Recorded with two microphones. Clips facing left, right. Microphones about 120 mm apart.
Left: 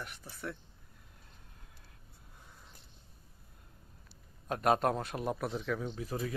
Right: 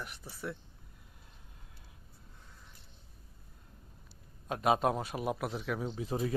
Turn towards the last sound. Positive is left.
turn(degrees=-20)  # may be behind; listen again after turning